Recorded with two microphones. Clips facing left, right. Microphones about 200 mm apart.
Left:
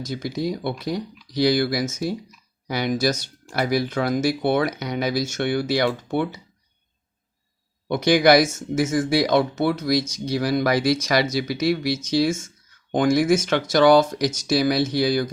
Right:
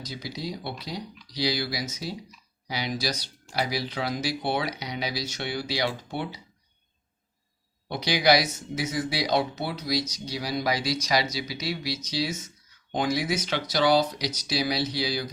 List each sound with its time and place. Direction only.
0.0 s speech: 50° left (ahead or behind)
7.9 s speech: 50° left (ahead or behind)